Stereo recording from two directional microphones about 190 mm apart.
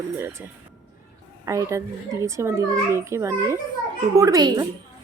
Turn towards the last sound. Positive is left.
turn(degrees=-20)  # may be behind; listen again after turning